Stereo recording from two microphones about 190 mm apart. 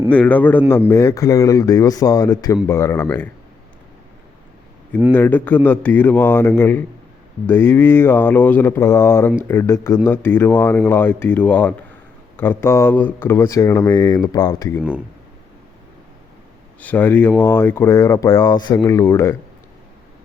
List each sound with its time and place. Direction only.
0.1 s speech: 10° left (ahead or behind)
5.1 s speech: 10° left (ahead or behind)
16.8 s speech: 10° left (ahead or behind)